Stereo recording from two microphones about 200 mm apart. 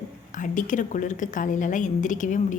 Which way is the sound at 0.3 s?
40° left (ahead or behind).